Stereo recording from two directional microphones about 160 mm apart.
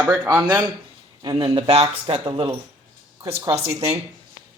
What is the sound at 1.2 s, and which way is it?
Speech, 30° right (ahead or behind).